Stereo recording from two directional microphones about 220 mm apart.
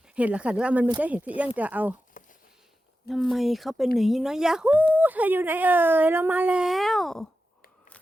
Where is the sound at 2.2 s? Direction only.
35° left (ahead or behind).